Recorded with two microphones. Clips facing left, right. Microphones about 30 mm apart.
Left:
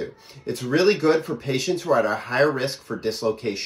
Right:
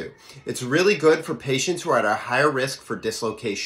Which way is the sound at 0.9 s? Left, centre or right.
Right.